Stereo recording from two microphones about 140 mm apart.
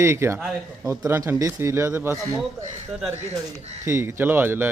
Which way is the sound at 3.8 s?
20° right (ahead or behind).